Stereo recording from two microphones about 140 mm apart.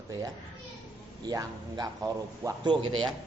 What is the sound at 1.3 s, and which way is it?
A man's voice, 25° right (ahead or behind).